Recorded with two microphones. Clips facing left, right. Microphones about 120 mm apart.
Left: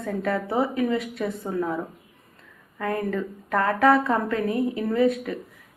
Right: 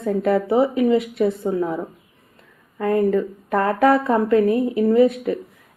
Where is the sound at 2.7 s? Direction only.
20° right (ahead or behind).